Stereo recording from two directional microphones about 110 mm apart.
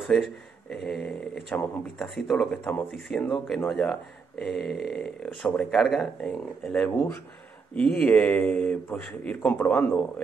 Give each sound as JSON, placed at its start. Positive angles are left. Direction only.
{"t": 0.0, "sound": "speech", "side_deg": 0}